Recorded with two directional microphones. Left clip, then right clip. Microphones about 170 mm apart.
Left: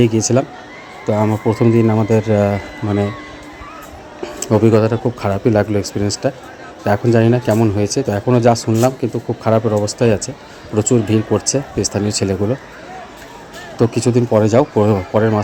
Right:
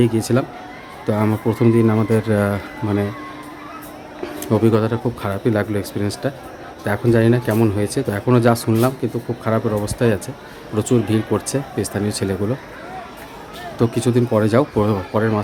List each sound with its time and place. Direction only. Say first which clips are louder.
0.1 s speech: left 5 dB; 10° left (ahead or behind)
1.0 s a man's voice: left 4 dB; 5° right (ahead or behind)
4.2 s a man's voice: left 4 dB; 10° left (ahead or behind)
9.0 s speech: left 3 dB; 15° left (ahead or behind)
13.7 s speech: left 3 dB; 10° left (ahead or behind)